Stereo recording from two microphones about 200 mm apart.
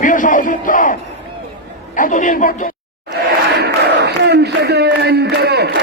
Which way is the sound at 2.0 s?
40° left (ahead or behind).